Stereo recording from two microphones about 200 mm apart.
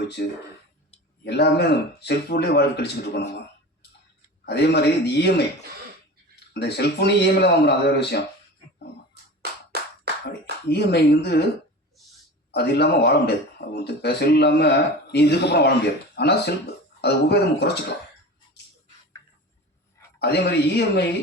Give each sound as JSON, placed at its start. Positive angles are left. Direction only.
{"t": 1.2, "sound": "a man's voice", "side_deg": 55}
{"t": 4.4, "sound": "a man's voice", "side_deg": 55}
{"t": 6.5, "sound": "a man's voice", "side_deg": 55}
{"t": 10.7, "sound": "a man's voice", "side_deg": 55}
{"t": 12.5, "sound": "a man's voice", "side_deg": 55}
{"t": 20.1, "sound": "a man's voice", "side_deg": 55}